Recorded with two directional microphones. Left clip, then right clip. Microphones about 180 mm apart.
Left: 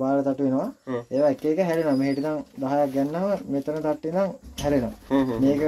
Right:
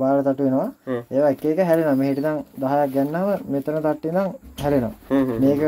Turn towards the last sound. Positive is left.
turn(degrees=-15)  # may be behind; listen again after turning